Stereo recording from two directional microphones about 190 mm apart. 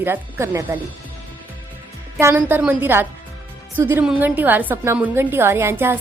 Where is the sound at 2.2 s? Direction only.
10° right (ahead or behind).